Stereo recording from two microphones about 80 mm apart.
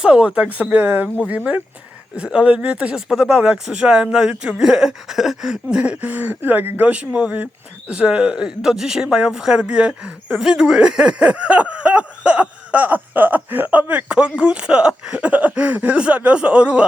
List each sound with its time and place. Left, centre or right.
0.0 s speech: centre
2.1 s speech: centre